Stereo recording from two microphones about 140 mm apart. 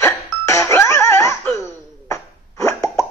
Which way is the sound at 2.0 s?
20° left (ahead or behind).